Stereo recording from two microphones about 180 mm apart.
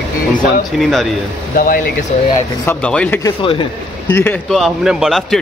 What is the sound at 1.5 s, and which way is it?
Speech, 50° left (ahead or behind).